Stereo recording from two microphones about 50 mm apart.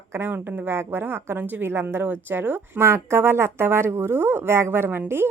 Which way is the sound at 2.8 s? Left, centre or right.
Right.